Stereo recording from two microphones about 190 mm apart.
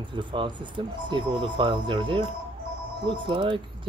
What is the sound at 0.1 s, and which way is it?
Speech, 25° right (ahead or behind).